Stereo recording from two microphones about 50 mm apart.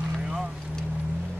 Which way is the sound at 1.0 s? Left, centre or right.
Right.